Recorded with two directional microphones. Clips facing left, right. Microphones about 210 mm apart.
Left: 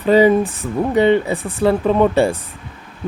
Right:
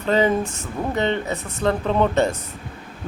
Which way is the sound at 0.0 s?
10° left (ahead or behind).